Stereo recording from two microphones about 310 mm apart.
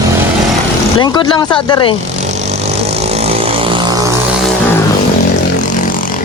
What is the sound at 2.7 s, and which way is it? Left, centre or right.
Vehicle, centre.